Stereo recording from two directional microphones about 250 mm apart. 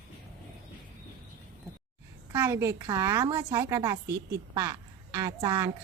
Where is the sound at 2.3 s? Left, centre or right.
Centre.